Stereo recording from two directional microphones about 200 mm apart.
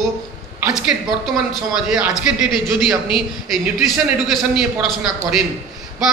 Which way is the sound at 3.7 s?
Centre (ahead or behind).